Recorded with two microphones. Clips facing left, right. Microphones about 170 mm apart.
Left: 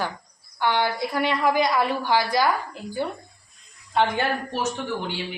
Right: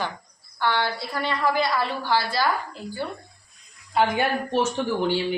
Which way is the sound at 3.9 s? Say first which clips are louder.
Even; 5° right (ahead or behind).